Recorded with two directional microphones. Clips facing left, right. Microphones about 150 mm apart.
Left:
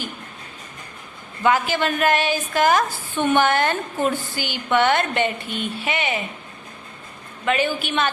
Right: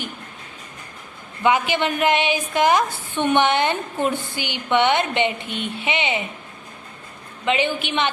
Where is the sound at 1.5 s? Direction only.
20° right (ahead or behind).